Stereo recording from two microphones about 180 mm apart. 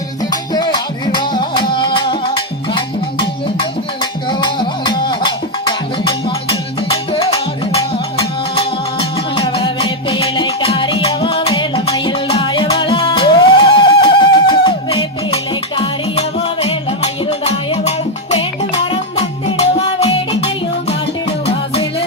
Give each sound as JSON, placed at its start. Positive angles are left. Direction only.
{"t": 0.5, "sound": "music", "side_deg": 25}
{"t": 8.5, "sound": "music", "side_deg": 30}
{"t": 21.4, "sound": "music", "side_deg": 30}